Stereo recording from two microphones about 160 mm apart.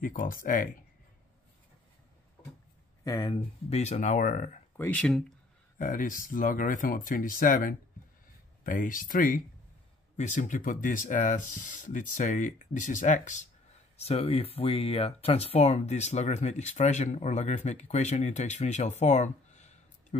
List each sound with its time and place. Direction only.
0.0 s speech: 60° left (ahead or behind)
3.0 s speech: 25° left (ahead or behind)
3.7 s speech: 45° left (ahead or behind)
4.7 s speech: 10° left (ahead or behind)
5.8 s speech: 55° left (ahead or behind)
13.9 s speech: 40° left (ahead or behind)